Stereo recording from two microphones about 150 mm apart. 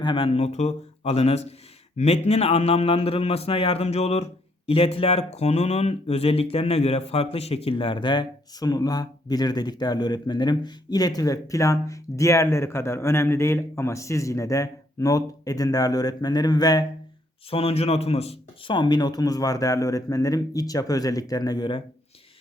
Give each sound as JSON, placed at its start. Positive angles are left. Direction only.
{"t": 0.0, "sound": "a man's voice", "side_deg": 35}
{"t": 17.5, "sound": "a man's voice", "side_deg": 40}